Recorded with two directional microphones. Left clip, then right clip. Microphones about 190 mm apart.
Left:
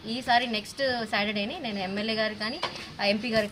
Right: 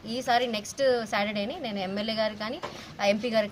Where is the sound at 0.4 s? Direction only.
20° right (ahead or behind).